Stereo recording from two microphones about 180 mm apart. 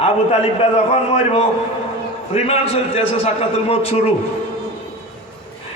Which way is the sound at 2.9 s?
35° left (ahead or behind).